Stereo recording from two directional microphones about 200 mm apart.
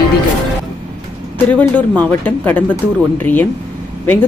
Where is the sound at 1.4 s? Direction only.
10° left (ahead or behind).